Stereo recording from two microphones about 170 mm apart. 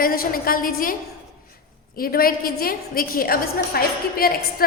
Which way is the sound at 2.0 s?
60° left (ahead or behind).